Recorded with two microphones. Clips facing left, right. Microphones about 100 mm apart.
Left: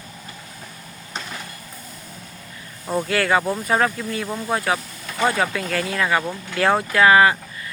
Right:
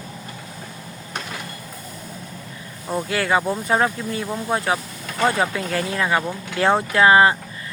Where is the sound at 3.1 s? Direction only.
20° right (ahead or behind).